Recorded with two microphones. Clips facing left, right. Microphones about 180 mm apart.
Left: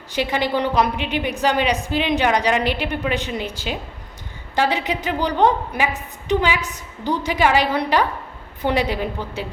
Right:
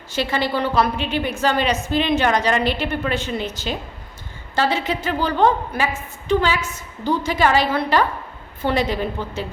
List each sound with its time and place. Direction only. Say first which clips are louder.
0.1 s a woman's voice: left 1 dB; 15° left (ahead or behind)